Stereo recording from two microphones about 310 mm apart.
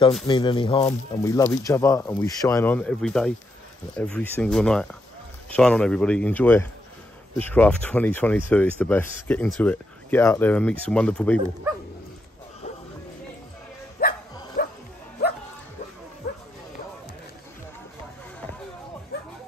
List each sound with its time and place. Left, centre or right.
0.3 s speech: centre
14.0 s bow-wow: left
14.6 s music: left